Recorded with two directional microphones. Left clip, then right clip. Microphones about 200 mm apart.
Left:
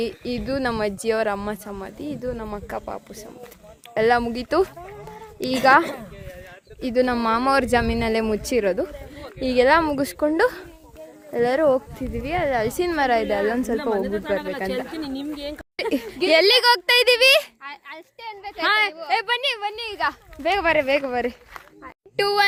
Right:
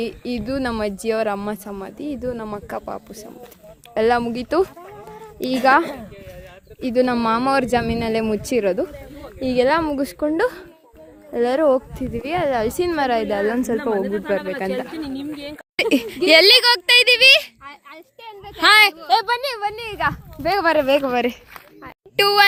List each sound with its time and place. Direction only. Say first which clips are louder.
0.0 s speech: right 1 dB; centre (ahead or behind)
9.1 s speech: even; 5° left (ahead or behind)
14.9 s speech: right 1 dB; 75° left (ahead or behind)
15.7 s speech: right 7 dB; 10° right (ahead or behind)
16.5 s speech: right 3 dB; 20° left (ahead or behind)
18.6 s a woman's voice: right 8 dB; 25° right (ahead or behind); by 22.4 s 10° right (ahead or behind)